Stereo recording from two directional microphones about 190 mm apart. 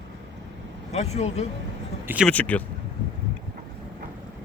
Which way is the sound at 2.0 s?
10° right (ahead or behind).